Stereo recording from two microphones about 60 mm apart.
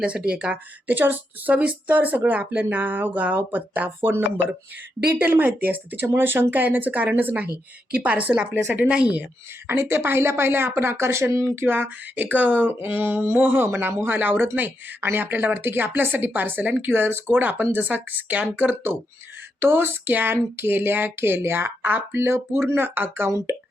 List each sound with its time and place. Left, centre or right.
0.0 s speech: centre
0.9 s speech: right
5.2 s speech: right
9.6 s speech: right
11.6 s speech: right